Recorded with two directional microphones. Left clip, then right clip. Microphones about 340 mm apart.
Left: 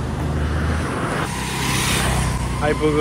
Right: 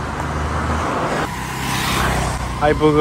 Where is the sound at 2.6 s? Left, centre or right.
Centre.